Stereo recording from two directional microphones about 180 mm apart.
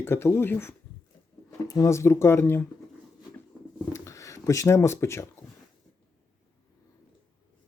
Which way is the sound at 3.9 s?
15° left (ahead or behind).